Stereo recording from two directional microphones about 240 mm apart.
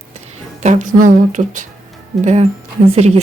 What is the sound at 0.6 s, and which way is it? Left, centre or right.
Speech, right.